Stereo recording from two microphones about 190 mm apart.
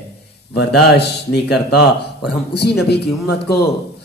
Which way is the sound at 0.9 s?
60° left (ahead or behind).